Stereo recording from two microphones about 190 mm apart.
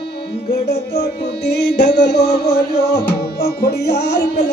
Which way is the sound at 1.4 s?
60° left (ahead or behind).